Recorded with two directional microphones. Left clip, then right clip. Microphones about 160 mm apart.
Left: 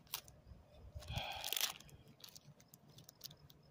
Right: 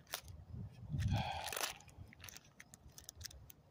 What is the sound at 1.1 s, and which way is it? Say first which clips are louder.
Crunch: right 2 dB; 15° right (ahead or behind).